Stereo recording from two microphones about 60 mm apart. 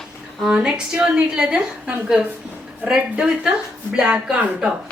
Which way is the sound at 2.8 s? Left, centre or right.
Centre.